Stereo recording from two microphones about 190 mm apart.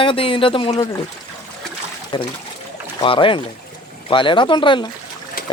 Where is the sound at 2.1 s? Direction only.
25° left (ahead or behind).